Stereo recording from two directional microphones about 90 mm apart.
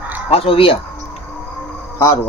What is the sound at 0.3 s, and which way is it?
Speech, 90° left.